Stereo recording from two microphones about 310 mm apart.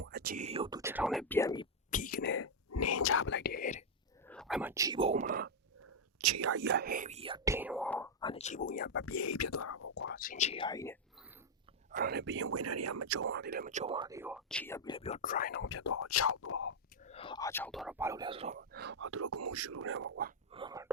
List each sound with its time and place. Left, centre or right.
0.0 s speech: right; by 1.6 s centre
1.9 s a sound: left
2.6 s whispering: left
4.3 s whispering: centre; by 5.5 s right
6.1 s whispering: right
6.6 s speech: right; by 9.0 s left
9.0 s speech: left
9.9 s speech: left; by 10.9 s centre
11.9 s speech: right
13.3 s speech: right; by 15.7 s left
15.7 s speech: left
17.1 s speech: centre; by 20.3 s right
20.5 s speech: centre